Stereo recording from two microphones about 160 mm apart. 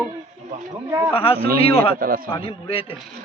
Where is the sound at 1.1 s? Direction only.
35° left (ahead or behind).